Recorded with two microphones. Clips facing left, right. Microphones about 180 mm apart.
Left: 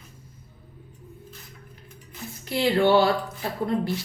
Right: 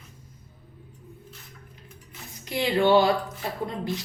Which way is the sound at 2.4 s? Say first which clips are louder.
Left 1 dB; 15° right (ahead or behind).